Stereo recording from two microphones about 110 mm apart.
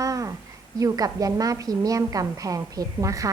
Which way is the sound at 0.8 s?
35° right (ahead or behind).